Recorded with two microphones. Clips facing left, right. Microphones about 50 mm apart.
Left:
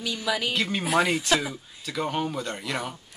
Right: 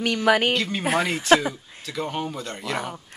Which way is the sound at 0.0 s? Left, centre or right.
Right.